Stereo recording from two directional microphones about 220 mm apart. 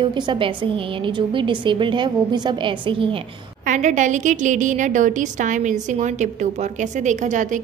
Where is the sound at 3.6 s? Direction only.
35° right (ahead or behind).